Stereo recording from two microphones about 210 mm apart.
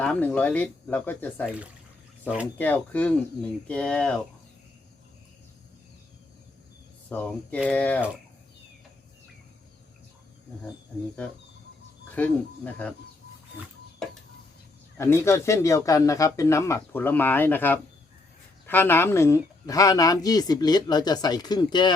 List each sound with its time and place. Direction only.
0.0 s speech: 5° left (ahead or behind)
2.2 s speech: 5° right (ahead or behind)
2.6 s speech: 10° left (ahead or behind)
7.1 s speech: 5° left (ahead or behind)
12.1 s speech: 10° left (ahead or behind)
14.9 s speech: 10° left (ahead or behind)